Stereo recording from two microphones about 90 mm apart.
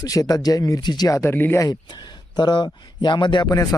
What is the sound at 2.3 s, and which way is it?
Speech, 55° left (ahead or behind).